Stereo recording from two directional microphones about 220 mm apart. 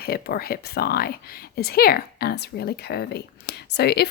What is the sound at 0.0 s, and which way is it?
A woman's voice, 45° left (ahead or behind).